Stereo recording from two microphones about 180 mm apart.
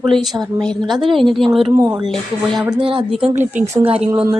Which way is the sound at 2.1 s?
Centre (ahead or behind).